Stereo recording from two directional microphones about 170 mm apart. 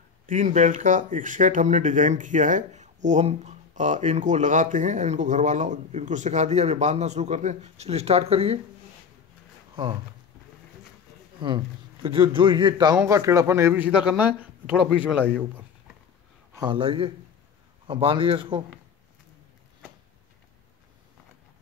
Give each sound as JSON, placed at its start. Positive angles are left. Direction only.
{"t": 0.3, "sound": "speech", "side_deg": -45}
{"t": 11.4, "sound": "a man's voice", "side_deg": -30}
{"t": 16.5, "sound": "a man's voice", "side_deg": -30}